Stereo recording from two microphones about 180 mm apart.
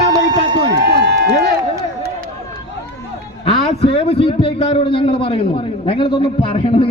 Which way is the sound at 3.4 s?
30° left (ahead or behind).